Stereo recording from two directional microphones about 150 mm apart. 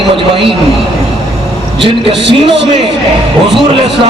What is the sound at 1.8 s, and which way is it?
A man's voice, 35° right (ahead or behind).